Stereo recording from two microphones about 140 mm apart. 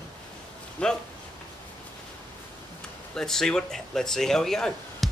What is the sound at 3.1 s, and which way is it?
Speech, 5° left (ahead or behind).